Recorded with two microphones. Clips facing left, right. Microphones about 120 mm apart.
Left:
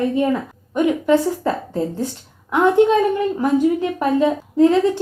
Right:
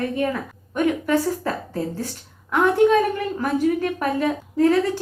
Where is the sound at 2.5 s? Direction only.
20° left (ahead or behind).